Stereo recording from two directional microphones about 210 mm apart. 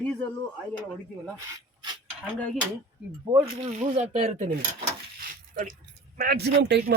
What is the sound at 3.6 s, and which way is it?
Speech, 30° right (ahead or behind).